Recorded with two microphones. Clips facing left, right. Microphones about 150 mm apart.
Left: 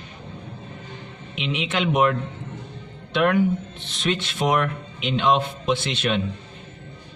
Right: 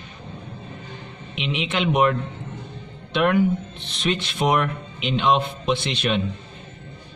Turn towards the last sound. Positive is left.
turn(degrees=0)  # may be behind; listen again after turning